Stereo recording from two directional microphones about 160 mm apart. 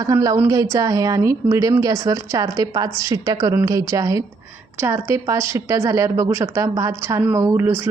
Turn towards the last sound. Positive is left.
turn(degrees=-15)  # may be behind; listen again after turning